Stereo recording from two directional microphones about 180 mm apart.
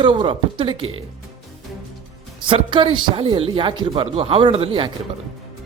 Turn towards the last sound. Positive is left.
turn(degrees=-30)  # may be behind; listen again after turning